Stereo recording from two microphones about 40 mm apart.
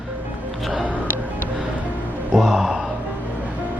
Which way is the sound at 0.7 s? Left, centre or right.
Right.